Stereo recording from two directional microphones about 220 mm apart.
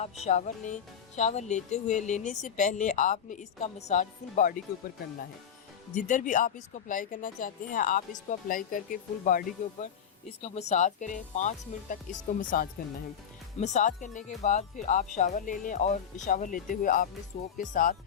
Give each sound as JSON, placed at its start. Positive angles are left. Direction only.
{"t": 0.3, "sound": "speech", "side_deg": 35}
{"t": 5.9, "sound": "speech", "side_deg": 35}
{"t": 10.2, "sound": "speech", "side_deg": 30}